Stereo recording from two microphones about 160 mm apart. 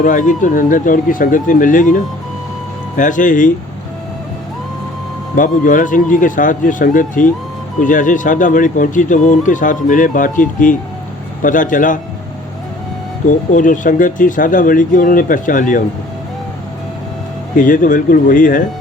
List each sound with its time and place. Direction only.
0.0 s speech: 55° left (ahead or behind)
3.0 s speech: 55° left (ahead or behind)
5.4 s speech: 55° left (ahead or behind)
13.2 s speech: 55° left (ahead or behind)
17.6 s speech: 55° left (ahead or behind)